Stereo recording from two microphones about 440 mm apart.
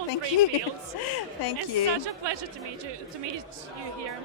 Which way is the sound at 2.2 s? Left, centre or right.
Right.